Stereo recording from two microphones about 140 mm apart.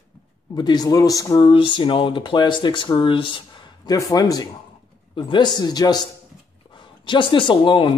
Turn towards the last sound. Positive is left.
turn(degrees=35)  # may be behind; listen again after turning